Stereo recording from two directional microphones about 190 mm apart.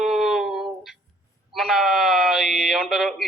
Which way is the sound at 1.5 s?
Centre (ahead or behind).